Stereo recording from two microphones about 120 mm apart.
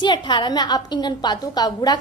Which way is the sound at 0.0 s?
40° left (ahead or behind).